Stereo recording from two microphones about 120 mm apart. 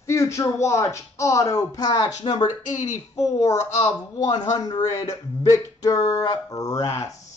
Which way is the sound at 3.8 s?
35° left (ahead or behind).